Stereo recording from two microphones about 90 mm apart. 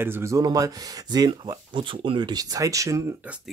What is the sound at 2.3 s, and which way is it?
Speech, 40° right (ahead or behind).